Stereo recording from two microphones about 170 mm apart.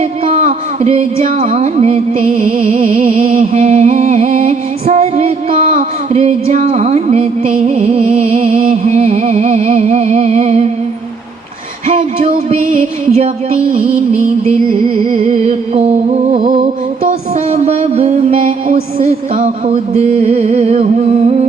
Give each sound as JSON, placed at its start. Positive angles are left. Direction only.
{"t": 0.3, "sound": "music", "side_deg": -40}
{"t": 2.7, "sound": "music", "side_deg": -50}
{"t": 3.5, "sound": "music", "side_deg": -40}
{"t": 11.9, "sound": "music", "side_deg": -35}
{"t": 14.7, "sound": "music", "side_deg": -55}
{"t": 15.3, "sound": "music", "side_deg": -40}
{"t": 16.4, "sound": "music", "side_deg": -55}
{"t": 17.5, "sound": "a sound", "side_deg": -35}
{"t": 19.6, "sound": "music", "side_deg": -40}